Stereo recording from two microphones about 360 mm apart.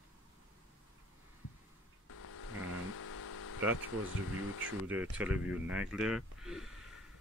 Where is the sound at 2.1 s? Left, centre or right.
Left.